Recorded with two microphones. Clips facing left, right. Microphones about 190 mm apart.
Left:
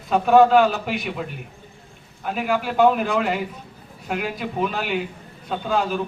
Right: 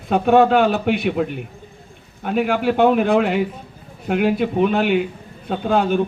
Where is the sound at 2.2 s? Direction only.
55° right (ahead or behind).